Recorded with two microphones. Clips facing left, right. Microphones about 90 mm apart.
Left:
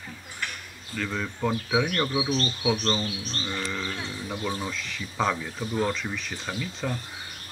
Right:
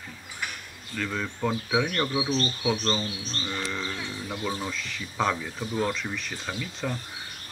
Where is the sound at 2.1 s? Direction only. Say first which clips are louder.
Even; 20° left (ahead or behind).